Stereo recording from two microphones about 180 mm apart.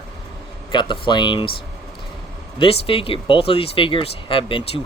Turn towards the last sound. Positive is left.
turn(degrees=30)  # may be behind; listen again after turning